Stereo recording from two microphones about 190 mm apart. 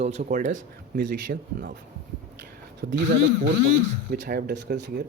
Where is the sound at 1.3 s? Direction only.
65° right (ahead or behind).